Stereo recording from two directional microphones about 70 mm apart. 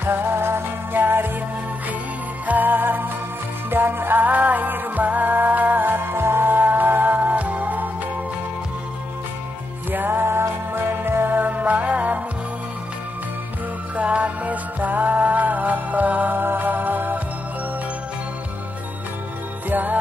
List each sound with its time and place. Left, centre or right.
0.0 s music: right
2.4 s music: right
9.8 s music: right
13.9 s music: centre
19.7 s music: right